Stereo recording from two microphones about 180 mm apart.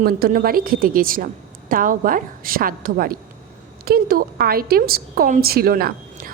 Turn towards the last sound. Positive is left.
turn(degrees=-55)  # may be behind; listen again after turning